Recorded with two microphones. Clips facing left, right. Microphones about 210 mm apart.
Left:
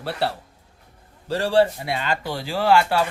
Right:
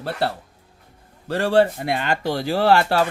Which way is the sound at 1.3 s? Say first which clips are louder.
Right 1 dB; 55° right (ahead or behind).